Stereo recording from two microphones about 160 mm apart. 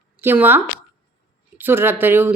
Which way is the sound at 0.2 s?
15° right (ahead or behind).